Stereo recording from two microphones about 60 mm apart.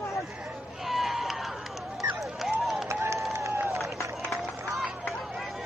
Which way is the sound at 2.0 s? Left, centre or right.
Centre.